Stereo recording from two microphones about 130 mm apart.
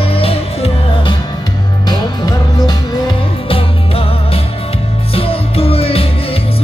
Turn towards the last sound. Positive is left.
turn(degrees=50)  # may be behind; listen again after turning